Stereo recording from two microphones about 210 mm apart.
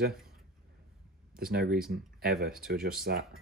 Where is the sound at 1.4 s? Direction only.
45° right (ahead or behind).